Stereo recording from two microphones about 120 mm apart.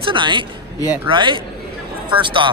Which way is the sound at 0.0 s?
45° right (ahead or behind).